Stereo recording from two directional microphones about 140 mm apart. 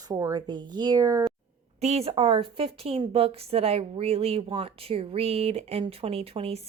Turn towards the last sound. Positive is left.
turn(degrees=-45)  # may be behind; listen again after turning